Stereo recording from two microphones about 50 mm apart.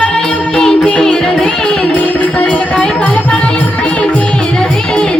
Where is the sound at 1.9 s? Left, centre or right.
Left.